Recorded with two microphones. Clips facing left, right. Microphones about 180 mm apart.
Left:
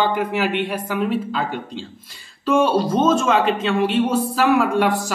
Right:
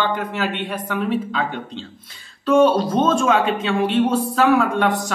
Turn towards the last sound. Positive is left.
turn(degrees=5)  # may be behind; listen again after turning